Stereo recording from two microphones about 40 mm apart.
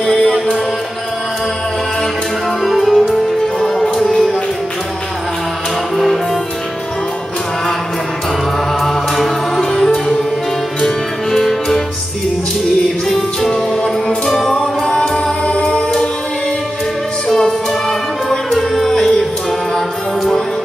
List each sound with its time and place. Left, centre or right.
0.0 s music: centre
2.6 s music: centre
8.8 s music: centre
11.3 s music: centre
13.1 s music: centre
14.5 s music: left
17.3 s music: centre